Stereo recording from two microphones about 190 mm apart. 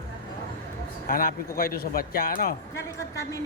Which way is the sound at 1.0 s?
50° left (ahead or behind).